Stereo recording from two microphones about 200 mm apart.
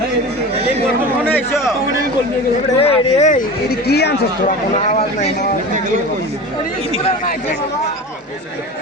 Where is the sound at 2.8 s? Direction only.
30° left (ahead or behind); by 4.6 s 55° left (ahead or behind).